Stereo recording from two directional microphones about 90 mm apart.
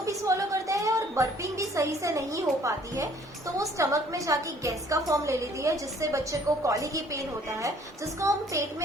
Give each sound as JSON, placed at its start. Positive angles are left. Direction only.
{"t": 0.0, "sound": "a woman's voice", "side_deg": -35}